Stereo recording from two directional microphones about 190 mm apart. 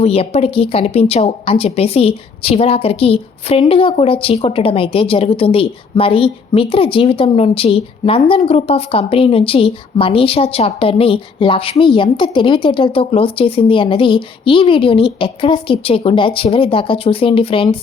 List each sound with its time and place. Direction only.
0.0 s a woman's voice: 30° left (ahead or behind)